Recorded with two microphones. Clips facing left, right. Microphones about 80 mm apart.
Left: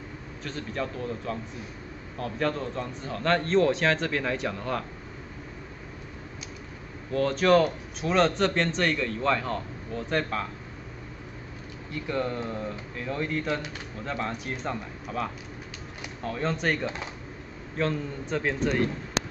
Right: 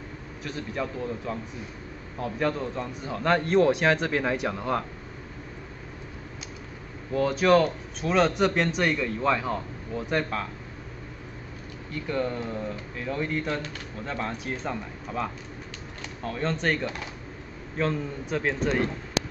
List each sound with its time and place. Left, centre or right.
0.4 s a man's voice: centre
7.1 s a man's voice: centre
11.9 s speech: centre
16.8 s speech: left
17.7 s speech: centre